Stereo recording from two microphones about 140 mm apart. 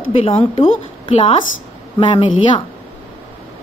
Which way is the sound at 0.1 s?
40° left (ahead or behind).